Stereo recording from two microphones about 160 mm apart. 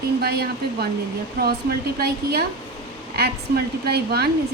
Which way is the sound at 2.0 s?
75° right (ahead or behind).